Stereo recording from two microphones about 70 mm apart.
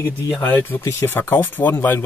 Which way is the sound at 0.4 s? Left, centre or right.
Left.